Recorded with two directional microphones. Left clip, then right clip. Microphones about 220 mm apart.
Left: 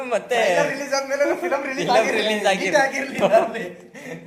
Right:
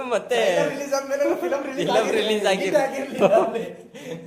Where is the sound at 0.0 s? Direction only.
20° right (ahead or behind).